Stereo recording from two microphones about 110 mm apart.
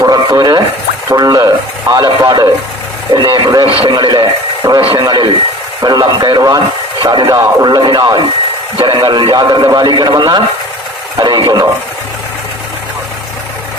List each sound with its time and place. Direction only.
0.0 s a sound: 35° right (ahead or behind)
1.1 s a man's voice: 35° right (ahead or behind)
4.6 s speech: 25° right (ahead or behind)
4.9 s a man's voice: 35° right (ahead or behind)